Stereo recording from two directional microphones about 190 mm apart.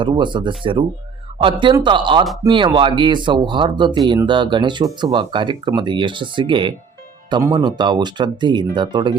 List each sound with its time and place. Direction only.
0.0 s speech: 25° right (ahead or behind)